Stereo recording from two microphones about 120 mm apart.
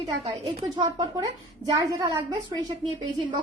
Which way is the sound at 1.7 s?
35° right (ahead or behind).